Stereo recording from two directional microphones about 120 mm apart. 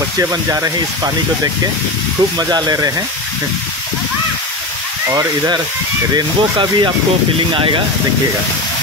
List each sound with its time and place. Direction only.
0.2 s speech: 25° right (ahead or behind)
6.1 s speech: 40° right (ahead or behind)